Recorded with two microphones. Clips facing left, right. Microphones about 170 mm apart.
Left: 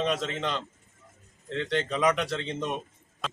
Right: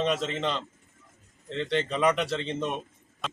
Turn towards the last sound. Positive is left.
turn(degrees=0)  # may be behind; listen again after turning